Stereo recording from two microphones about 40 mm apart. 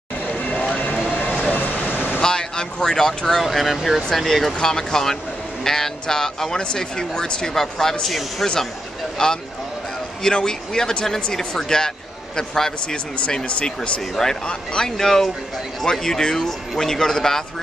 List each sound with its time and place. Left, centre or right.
0.4 s vehicle: left
1.5 s vehicle: left
2.2 s a sound: centre
3.4 s speech: centre
4.6 s speech: centre
9.2 s speech: centre
12.8 s speech: left
14.9 s speech: centre